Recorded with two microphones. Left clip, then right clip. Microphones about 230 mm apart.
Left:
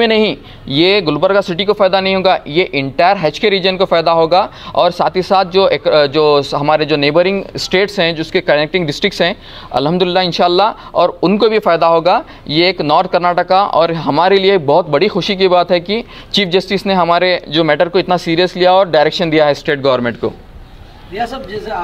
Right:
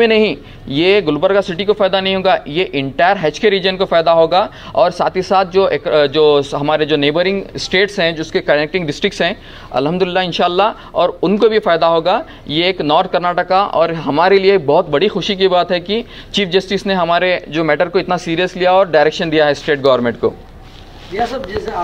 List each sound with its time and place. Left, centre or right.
0.0 s a man's voice: left